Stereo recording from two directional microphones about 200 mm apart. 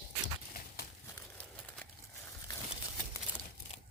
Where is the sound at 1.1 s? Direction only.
5° left (ahead or behind).